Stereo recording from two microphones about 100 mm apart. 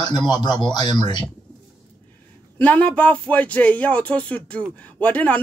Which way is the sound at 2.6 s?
15° left (ahead or behind).